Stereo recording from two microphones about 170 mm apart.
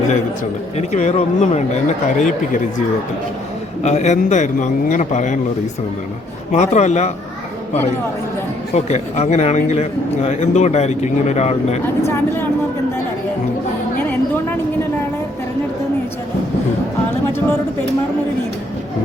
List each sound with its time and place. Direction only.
0.8 s speech: 40° left (ahead or behind)
3.8 s speech: 40° left (ahead or behind)
6.5 s speech: 45° left (ahead or behind)
8.7 s a man's voice: 40° left (ahead or behind)
12.0 s speech: 15° left (ahead or behind)